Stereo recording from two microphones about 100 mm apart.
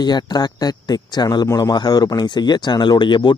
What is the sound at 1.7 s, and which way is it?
Speech, 45° left (ahead or behind).